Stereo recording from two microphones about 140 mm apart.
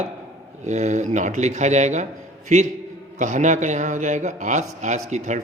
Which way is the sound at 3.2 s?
60° right (ahead or behind).